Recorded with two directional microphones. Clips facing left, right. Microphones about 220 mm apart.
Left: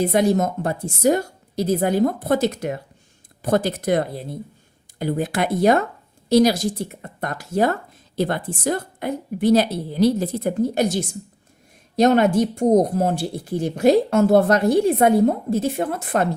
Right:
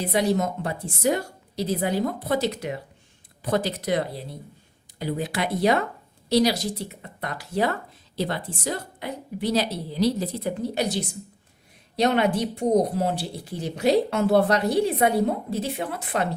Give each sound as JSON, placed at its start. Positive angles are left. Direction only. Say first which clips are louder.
{"t": 0.0, "sound": "speech", "louder": "left 5 dB", "side_deg": 50}